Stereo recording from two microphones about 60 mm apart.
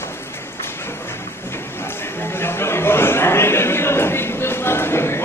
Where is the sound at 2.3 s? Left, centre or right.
Left.